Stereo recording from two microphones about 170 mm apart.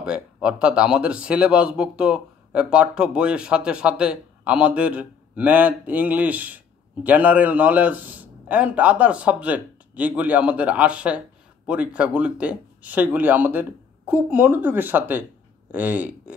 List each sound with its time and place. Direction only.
0.0 s speech: 5° right (ahead or behind)